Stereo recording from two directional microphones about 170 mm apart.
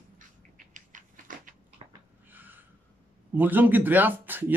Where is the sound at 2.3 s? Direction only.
10° right (ahead or behind).